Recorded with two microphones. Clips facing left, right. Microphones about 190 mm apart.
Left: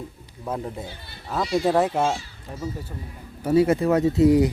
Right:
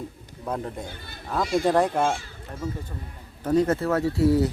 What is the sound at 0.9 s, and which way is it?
Speech, 50° right (ahead or behind).